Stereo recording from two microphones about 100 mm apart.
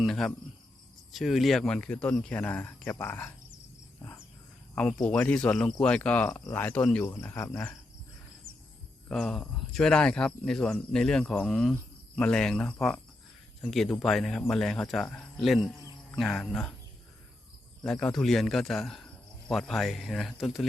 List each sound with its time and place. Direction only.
0.0 s speech: 5° left (ahead or behind); by 3.3 s 25° left (ahead or behind)
4.7 s speech: 10° left (ahead or behind)
7.0 s speech: 25° left (ahead or behind)
8.5 s a sound: 25° right (ahead or behind)
9.0 s speech: 5° left (ahead or behind)
17.8 s speech: 10° left (ahead or behind)